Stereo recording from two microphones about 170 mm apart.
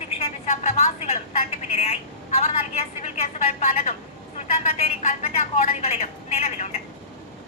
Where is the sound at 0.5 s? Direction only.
40° left (ahead or behind).